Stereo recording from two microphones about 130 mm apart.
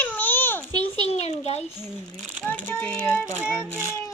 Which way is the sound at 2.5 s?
15° left (ahead or behind).